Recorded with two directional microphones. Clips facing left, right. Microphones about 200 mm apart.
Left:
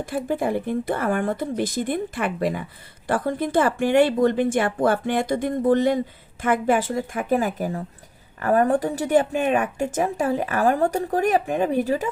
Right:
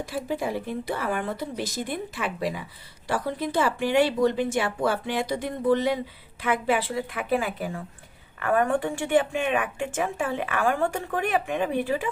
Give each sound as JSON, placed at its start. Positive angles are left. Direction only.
{"t": 0.3, "sound": "a woman's voice", "side_deg": 50}